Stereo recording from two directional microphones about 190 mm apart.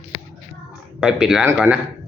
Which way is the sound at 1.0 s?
5° right (ahead or behind).